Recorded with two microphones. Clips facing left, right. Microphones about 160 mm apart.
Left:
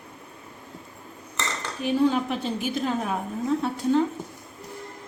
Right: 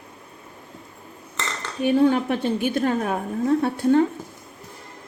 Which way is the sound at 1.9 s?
60° right (ahead or behind).